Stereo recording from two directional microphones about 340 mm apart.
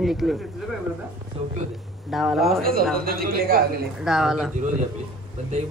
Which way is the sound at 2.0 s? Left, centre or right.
Centre.